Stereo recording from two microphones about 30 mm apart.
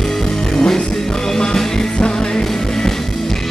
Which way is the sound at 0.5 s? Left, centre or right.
Centre.